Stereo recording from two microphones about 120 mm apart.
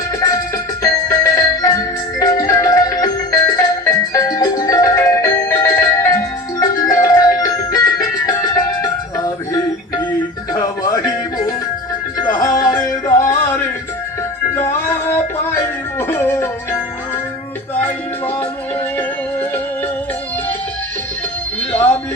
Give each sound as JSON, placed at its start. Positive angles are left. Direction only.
{"t": 0.8, "sound": "music", "side_deg": 30}
{"t": 15.0, "sound": "music", "side_deg": 20}
{"t": 21.7, "sound": "a sound", "side_deg": 15}